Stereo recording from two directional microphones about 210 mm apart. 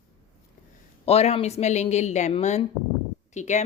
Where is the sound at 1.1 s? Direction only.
30° left (ahead or behind).